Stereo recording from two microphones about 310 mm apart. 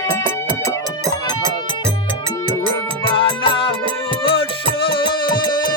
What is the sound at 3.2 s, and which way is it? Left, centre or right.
Music, centre.